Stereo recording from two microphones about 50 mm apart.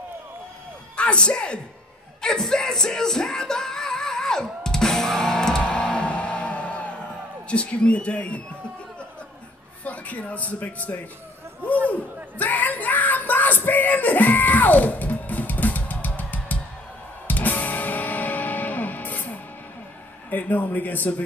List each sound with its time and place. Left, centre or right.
0.9 s speech: left
2.2 s music: centre
7.4 s a man's voice: left
9.8 s a man's voice: left
12.4 s yell: left
17.3 s music: left
20.2 s a man's voice: left